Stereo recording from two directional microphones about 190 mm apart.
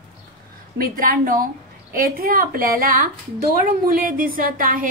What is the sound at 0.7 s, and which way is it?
A woman's voice, 50° right (ahead or behind).